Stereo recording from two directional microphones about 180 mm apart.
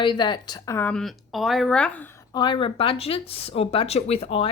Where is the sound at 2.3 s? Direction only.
25° left (ahead or behind).